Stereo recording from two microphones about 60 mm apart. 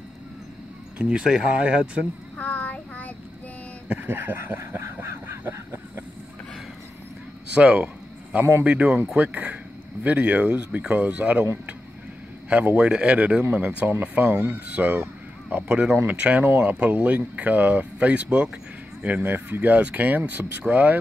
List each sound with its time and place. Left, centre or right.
0.9 s speech: centre
2.3 s child singing: left
3.9 s a sound: right
7.5 s a sound: centre
8.6 s speech: right
12.4 s a man's voice: right
15.7 s speech: centre